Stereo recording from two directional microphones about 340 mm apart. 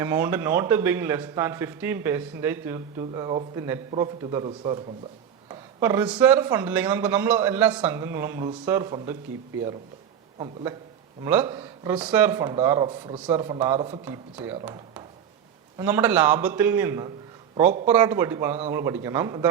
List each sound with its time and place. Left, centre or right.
0.0 s a man's voice: centre
10.3 s a man's voice: centre